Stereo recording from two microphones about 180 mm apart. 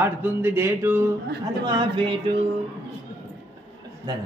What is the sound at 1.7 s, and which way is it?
Mantra, 30° right (ahead or behind).